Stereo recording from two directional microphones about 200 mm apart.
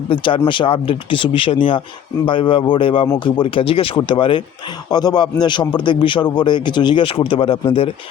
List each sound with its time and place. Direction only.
0.1 s a man's voice: 25° left (ahead or behind)